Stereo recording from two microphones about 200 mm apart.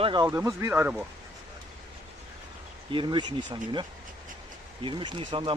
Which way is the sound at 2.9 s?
25° right (ahead or behind).